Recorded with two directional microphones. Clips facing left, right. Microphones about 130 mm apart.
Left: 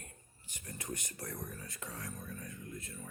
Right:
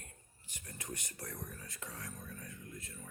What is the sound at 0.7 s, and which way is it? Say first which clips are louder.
Speech: left 3 dB; 20° left (ahead or behind).